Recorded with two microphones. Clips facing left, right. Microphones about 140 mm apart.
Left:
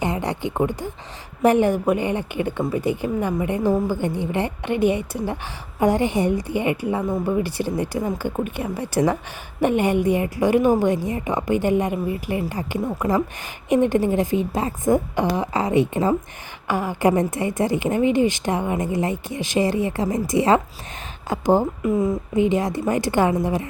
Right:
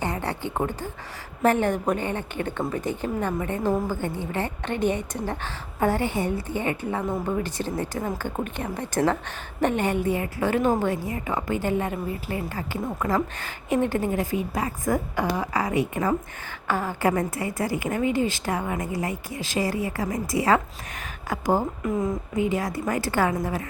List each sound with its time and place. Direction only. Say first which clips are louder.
0.0 s a sound: left 4 dB; 15° left (ahead or behind)
1.4 s a woman's voice: left 5 dB; 15° left (ahead or behind)
16.6 s a woman's voice: left 4 dB; 15° left (ahead or behind)
21.8 s a woman's voice: left 5 dB; 10° left (ahead or behind)
22.4 s a woman's voice: left 6 dB; 20° left (ahead or behind)